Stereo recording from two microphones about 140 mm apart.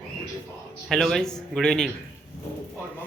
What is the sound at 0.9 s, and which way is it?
Speech, 5° left (ahead or behind).